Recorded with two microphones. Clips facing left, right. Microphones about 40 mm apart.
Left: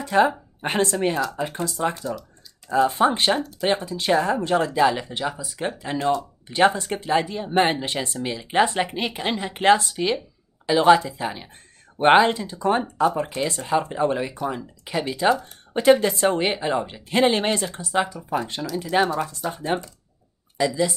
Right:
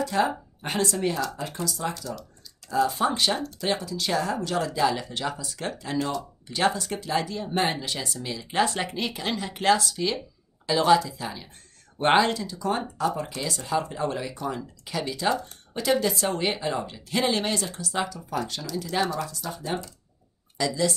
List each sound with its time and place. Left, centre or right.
0.0 s speech: left
5.4 s speech: centre; by 19.9 s left
20.5 s speech: centre